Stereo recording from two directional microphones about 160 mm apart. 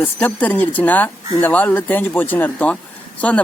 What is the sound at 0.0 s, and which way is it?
Speech, 10° left (ahead or behind).